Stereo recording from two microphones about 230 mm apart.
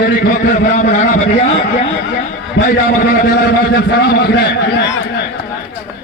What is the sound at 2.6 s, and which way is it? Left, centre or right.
A man's voice, left.